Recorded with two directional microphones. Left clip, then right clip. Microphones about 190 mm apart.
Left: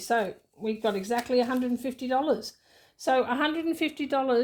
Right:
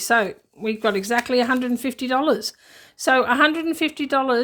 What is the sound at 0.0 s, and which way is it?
A woman's voice, 35° right (ahead or behind).